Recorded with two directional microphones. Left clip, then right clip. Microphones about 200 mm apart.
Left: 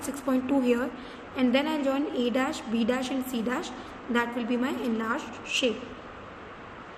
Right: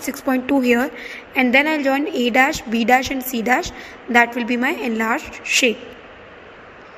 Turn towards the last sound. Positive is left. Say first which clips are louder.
# right 10 dB
turn(degrees=-35)  # may be behind; listen again after turning